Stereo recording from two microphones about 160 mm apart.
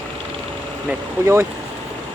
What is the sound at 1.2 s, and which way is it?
Speech, 15° right (ahead or behind).